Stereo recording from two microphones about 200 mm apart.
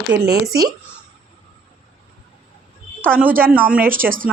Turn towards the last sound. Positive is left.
turn(degrees=-45)  # may be behind; listen again after turning